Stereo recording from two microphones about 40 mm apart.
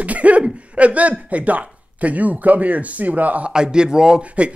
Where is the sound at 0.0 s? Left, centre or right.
Right.